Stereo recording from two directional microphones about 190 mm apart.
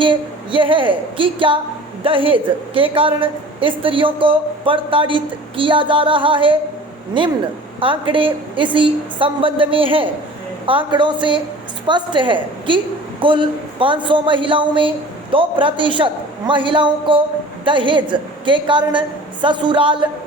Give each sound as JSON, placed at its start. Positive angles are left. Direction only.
{"t": 0.0, "sound": "a woman's voice", "side_deg": -25}